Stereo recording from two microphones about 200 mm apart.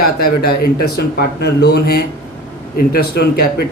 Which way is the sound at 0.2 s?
45° left (ahead or behind).